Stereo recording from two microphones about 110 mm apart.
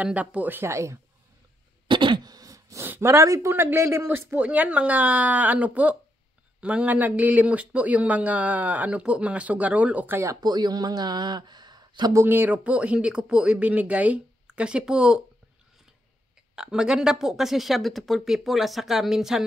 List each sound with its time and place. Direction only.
0.0 s speech: 10° right (ahead or behind)
1.9 s throat clearing: 45° right (ahead or behind); by 2.9 s 30° right (ahead or behind)
2.9 s speech: 25° right (ahead or behind)
10.4 s speech: 40° right (ahead or behind)
12.1 s speech: 20° right (ahead or behind)
16.5 s speech: 5° right (ahead or behind)